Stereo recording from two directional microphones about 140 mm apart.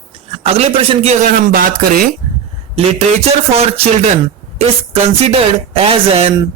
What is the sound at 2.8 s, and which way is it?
Speech, 50° right (ahead or behind).